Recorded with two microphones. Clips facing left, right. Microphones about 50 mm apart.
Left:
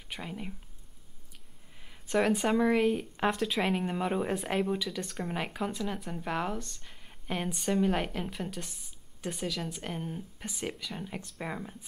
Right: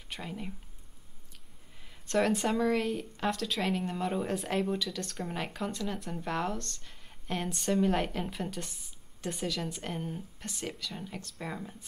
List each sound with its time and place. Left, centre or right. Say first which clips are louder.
0.1 s speech: even; centre
1.8 s speech: even; centre